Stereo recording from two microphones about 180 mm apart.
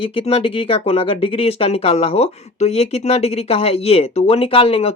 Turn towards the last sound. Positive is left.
turn(degrees=30)  # may be behind; listen again after turning